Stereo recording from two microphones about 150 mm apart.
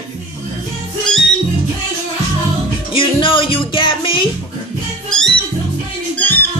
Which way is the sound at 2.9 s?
35° left (ahead or behind).